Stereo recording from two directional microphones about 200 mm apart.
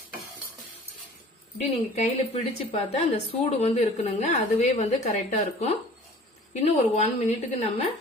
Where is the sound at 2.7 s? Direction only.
30° left (ahead or behind).